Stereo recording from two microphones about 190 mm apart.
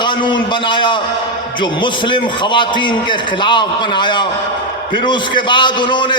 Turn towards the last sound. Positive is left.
turn(degrees=25)  # may be behind; listen again after turning